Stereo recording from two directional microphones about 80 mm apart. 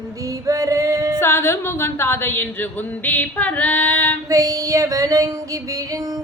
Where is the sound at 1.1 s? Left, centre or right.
Left.